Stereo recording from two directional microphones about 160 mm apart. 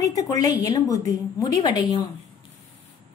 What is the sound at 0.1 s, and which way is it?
A woman's voice, 20° left (ahead or behind).